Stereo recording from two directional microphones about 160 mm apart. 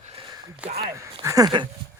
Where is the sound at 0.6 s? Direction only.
35° right (ahead or behind).